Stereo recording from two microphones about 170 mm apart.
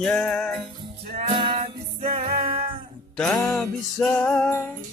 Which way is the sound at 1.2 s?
30° right (ahead or behind).